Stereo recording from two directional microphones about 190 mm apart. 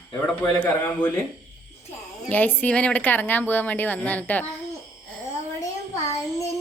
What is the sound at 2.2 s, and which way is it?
A woman's voice, 10° left (ahead or behind).